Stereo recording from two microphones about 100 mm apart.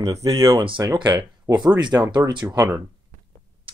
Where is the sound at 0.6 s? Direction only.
55° right (ahead or behind).